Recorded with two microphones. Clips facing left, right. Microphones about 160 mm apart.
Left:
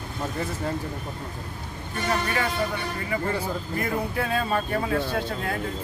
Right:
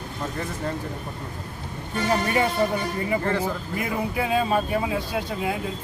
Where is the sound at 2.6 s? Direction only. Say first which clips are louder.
Right 5 dB; 25° right (ahead or behind).